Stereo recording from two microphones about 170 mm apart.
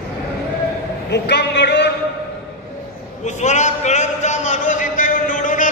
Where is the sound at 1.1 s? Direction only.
85° left.